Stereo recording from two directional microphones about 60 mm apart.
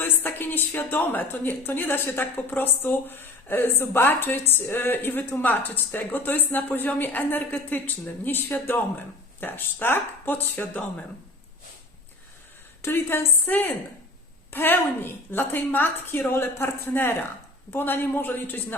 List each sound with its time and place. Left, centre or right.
0.0 s a sound: left
0.8 s speech: left
12.8 s speech: left